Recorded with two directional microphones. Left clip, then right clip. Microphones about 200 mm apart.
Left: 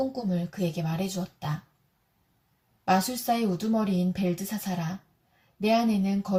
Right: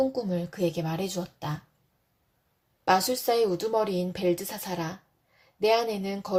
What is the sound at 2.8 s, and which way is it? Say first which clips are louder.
Speech: right 2 dB; 40° right (ahead or behind).